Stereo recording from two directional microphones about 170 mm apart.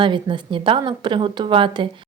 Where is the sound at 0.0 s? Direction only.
30° right (ahead or behind).